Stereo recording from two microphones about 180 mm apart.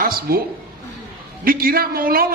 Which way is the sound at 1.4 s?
55° right (ahead or behind).